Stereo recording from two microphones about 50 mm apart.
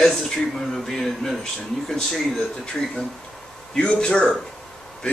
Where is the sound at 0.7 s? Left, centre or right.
Centre.